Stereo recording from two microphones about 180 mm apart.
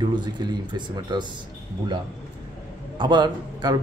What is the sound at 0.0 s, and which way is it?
A man's voice, 25° right (ahead or behind).